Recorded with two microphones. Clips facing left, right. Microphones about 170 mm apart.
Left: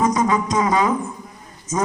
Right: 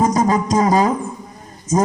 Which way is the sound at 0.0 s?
35° right (ahead or behind).